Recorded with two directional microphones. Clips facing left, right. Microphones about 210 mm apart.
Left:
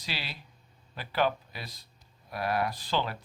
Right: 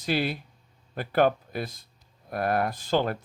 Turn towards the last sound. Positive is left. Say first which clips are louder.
# right 6 dB
turn(degrees=-50)  # may be behind; listen again after turning